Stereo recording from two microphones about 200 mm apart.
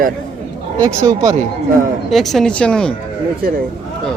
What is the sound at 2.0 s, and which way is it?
Speech, centre (ahead or behind).